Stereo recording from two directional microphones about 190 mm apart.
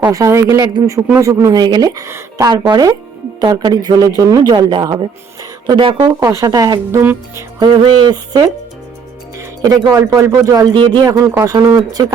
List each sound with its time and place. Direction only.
0.0 s a woman's voice: 15° right (ahead or behind)
6.1 s a woman's voice: 15° right (ahead or behind)
7.6 s speech: 25° right (ahead or behind)
9.6 s a woman's voice: 20° right (ahead or behind)